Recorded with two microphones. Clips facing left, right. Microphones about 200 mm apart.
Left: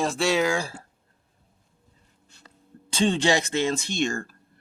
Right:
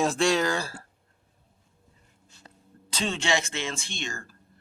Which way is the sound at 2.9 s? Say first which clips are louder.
Left 6 dB; 30° left (ahead or behind).